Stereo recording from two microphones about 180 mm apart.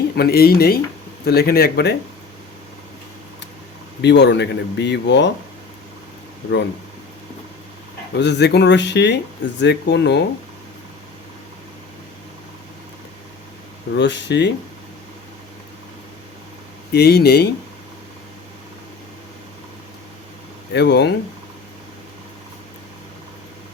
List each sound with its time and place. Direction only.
0.2 s speech: 60° left (ahead or behind)
4.0 s speech: 75° left (ahead or behind)
8.2 s speech: 65° left (ahead or behind)
13.9 s speech: 75° left (ahead or behind)
16.9 s speech: 65° left (ahead or behind)
20.7 s speech: 70° left (ahead or behind)